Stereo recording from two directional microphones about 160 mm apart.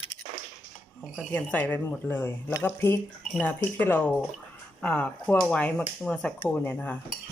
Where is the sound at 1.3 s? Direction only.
10° left (ahead or behind).